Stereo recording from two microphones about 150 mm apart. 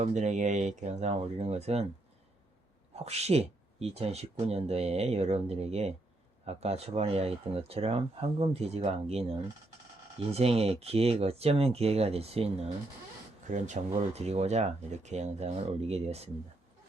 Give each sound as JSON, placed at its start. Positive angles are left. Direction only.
{"t": 0.0, "sound": "speech", "side_deg": -55}
{"t": 2.9, "sound": "speech", "side_deg": -45}
{"t": 10.3, "sound": "speech", "side_deg": -40}